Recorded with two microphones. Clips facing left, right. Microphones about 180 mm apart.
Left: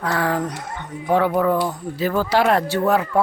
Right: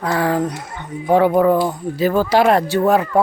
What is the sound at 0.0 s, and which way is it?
Speech, 10° right (ahead or behind).